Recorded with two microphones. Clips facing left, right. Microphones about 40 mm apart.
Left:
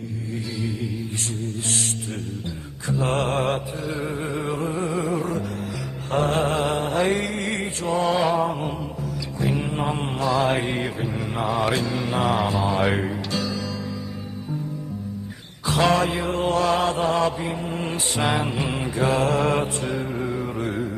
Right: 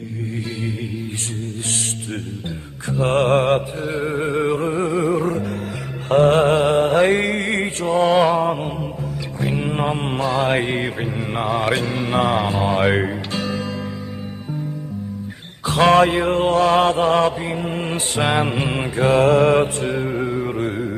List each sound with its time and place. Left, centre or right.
2.9 s music: right
6.1 s mantra: right
13.3 s music: right
15.6 s mantra: right
20.4 s music: right